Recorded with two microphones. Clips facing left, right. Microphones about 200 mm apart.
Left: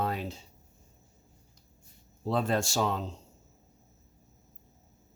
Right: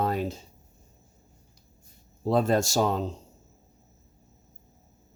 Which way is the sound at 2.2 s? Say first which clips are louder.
Right 5 dB; 40° right (ahead or behind).